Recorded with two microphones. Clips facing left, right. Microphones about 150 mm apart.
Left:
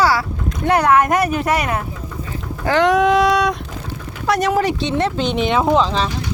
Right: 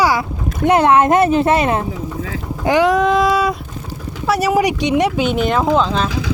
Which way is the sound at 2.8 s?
Centre (ahead or behind).